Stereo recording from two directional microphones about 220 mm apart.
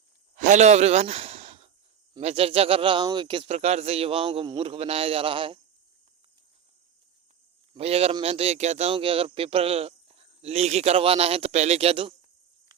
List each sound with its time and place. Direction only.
0.3 s a sound: 35° right (ahead or behind)
2.1 s speech: 25° right (ahead or behind)
7.7 s speech: 25° right (ahead or behind)